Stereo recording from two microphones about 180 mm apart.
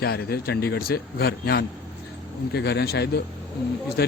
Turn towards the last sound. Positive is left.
turn(degrees=65)  # may be behind; listen again after turning